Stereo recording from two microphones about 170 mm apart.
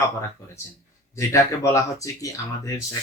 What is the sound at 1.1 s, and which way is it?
Speech, 15° left (ahead or behind).